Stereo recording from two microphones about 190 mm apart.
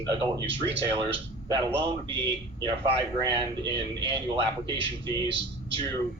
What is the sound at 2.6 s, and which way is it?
Speech, 25° right (ahead or behind).